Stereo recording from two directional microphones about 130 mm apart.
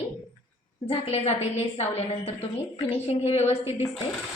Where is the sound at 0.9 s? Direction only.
55° left (ahead or behind).